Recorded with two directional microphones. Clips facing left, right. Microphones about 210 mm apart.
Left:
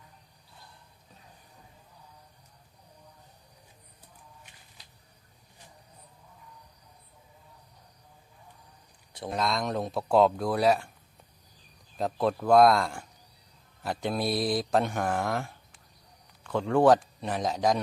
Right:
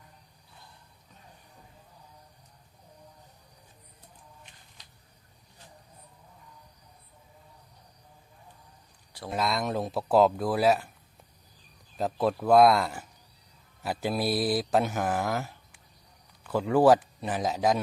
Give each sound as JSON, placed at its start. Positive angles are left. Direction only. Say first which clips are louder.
{"t": 9.3, "sound": "speech", "louder": "right 1 dB", "side_deg": -5}
{"t": 11.9, "sound": "speech", "louder": "even", "side_deg": 0}